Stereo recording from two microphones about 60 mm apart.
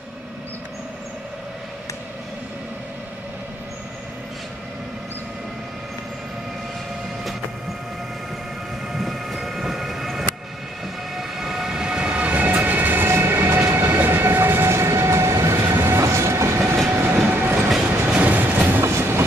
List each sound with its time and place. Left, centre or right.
8.9 s train: centre; by 13.1 s right
13.1 s train: right
13.7 s train: right